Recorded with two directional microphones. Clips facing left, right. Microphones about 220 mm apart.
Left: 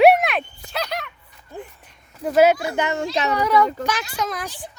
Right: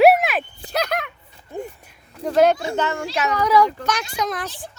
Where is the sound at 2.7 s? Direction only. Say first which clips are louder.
Left 1 dB; 15° left (ahead or behind).